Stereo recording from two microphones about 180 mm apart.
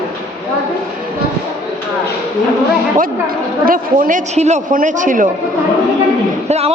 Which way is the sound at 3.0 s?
50° right (ahead or behind).